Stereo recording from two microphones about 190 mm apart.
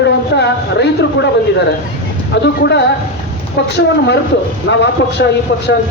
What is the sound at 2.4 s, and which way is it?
A man's voice, 65° left (ahead or behind).